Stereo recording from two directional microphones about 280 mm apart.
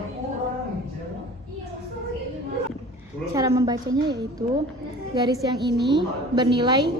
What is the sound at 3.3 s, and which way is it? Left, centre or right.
A woman's voice, centre.